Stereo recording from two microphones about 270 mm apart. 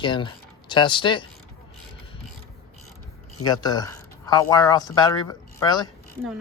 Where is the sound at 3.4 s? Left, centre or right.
Centre.